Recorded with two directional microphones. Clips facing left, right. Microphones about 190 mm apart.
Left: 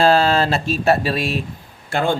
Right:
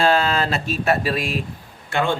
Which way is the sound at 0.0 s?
35° left (ahead or behind).